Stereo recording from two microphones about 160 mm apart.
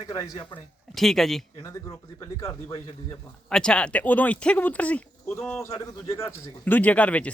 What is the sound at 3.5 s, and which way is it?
Speech, 5° left (ahead or behind).